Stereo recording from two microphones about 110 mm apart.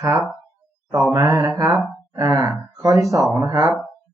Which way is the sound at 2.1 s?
30° right (ahead or behind).